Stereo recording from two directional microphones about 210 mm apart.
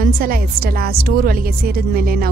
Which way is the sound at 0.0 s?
45° right (ahead or behind).